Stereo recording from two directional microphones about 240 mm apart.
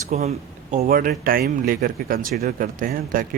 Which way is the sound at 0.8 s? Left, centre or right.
Right.